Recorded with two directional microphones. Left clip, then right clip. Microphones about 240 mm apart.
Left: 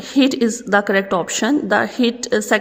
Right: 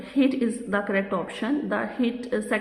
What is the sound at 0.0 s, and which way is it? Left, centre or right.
A woman's voice, left.